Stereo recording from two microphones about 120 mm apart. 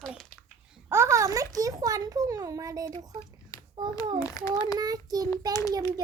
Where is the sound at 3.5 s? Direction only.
25° left (ahead or behind).